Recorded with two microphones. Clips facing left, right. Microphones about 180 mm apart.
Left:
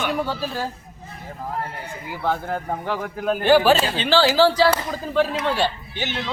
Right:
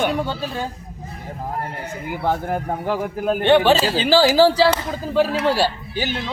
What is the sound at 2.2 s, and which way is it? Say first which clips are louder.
A man's voice: right 2 dB; 15° right (ahead or behind).